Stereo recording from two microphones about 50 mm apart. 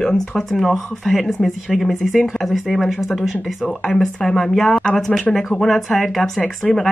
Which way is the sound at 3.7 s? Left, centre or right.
Centre.